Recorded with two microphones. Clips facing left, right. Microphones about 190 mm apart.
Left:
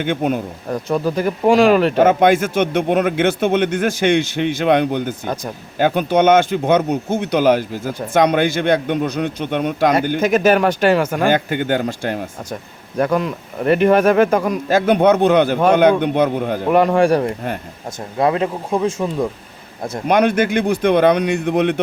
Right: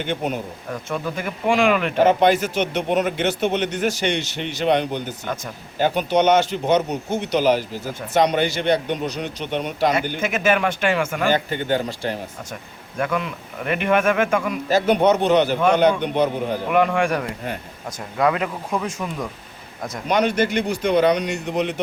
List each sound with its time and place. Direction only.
0.0 s speech: 55° left (ahead or behind)
0.7 s speech: 35° left (ahead or behind)
10.2 s speech: 40° left (ahead or behind)
11.3 s speech: 50° left (ahead or behind)
13.0 s speech: 40° left (ahead or behind); by 16.6 s 55° left (ahead or behind)
16.6 s speech: 40° left (ahead or behind)
20.1 s a man's voice: 55° left (ahead or behind)